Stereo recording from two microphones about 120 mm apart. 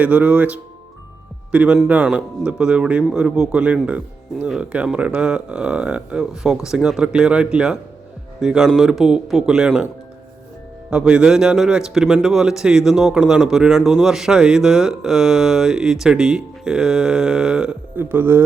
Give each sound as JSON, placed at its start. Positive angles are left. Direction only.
{"t": 0.0, "sound": "a man's voice", "side_deg": -10}
{"t": 18.0, "sound": "speech", "side_deg": -15}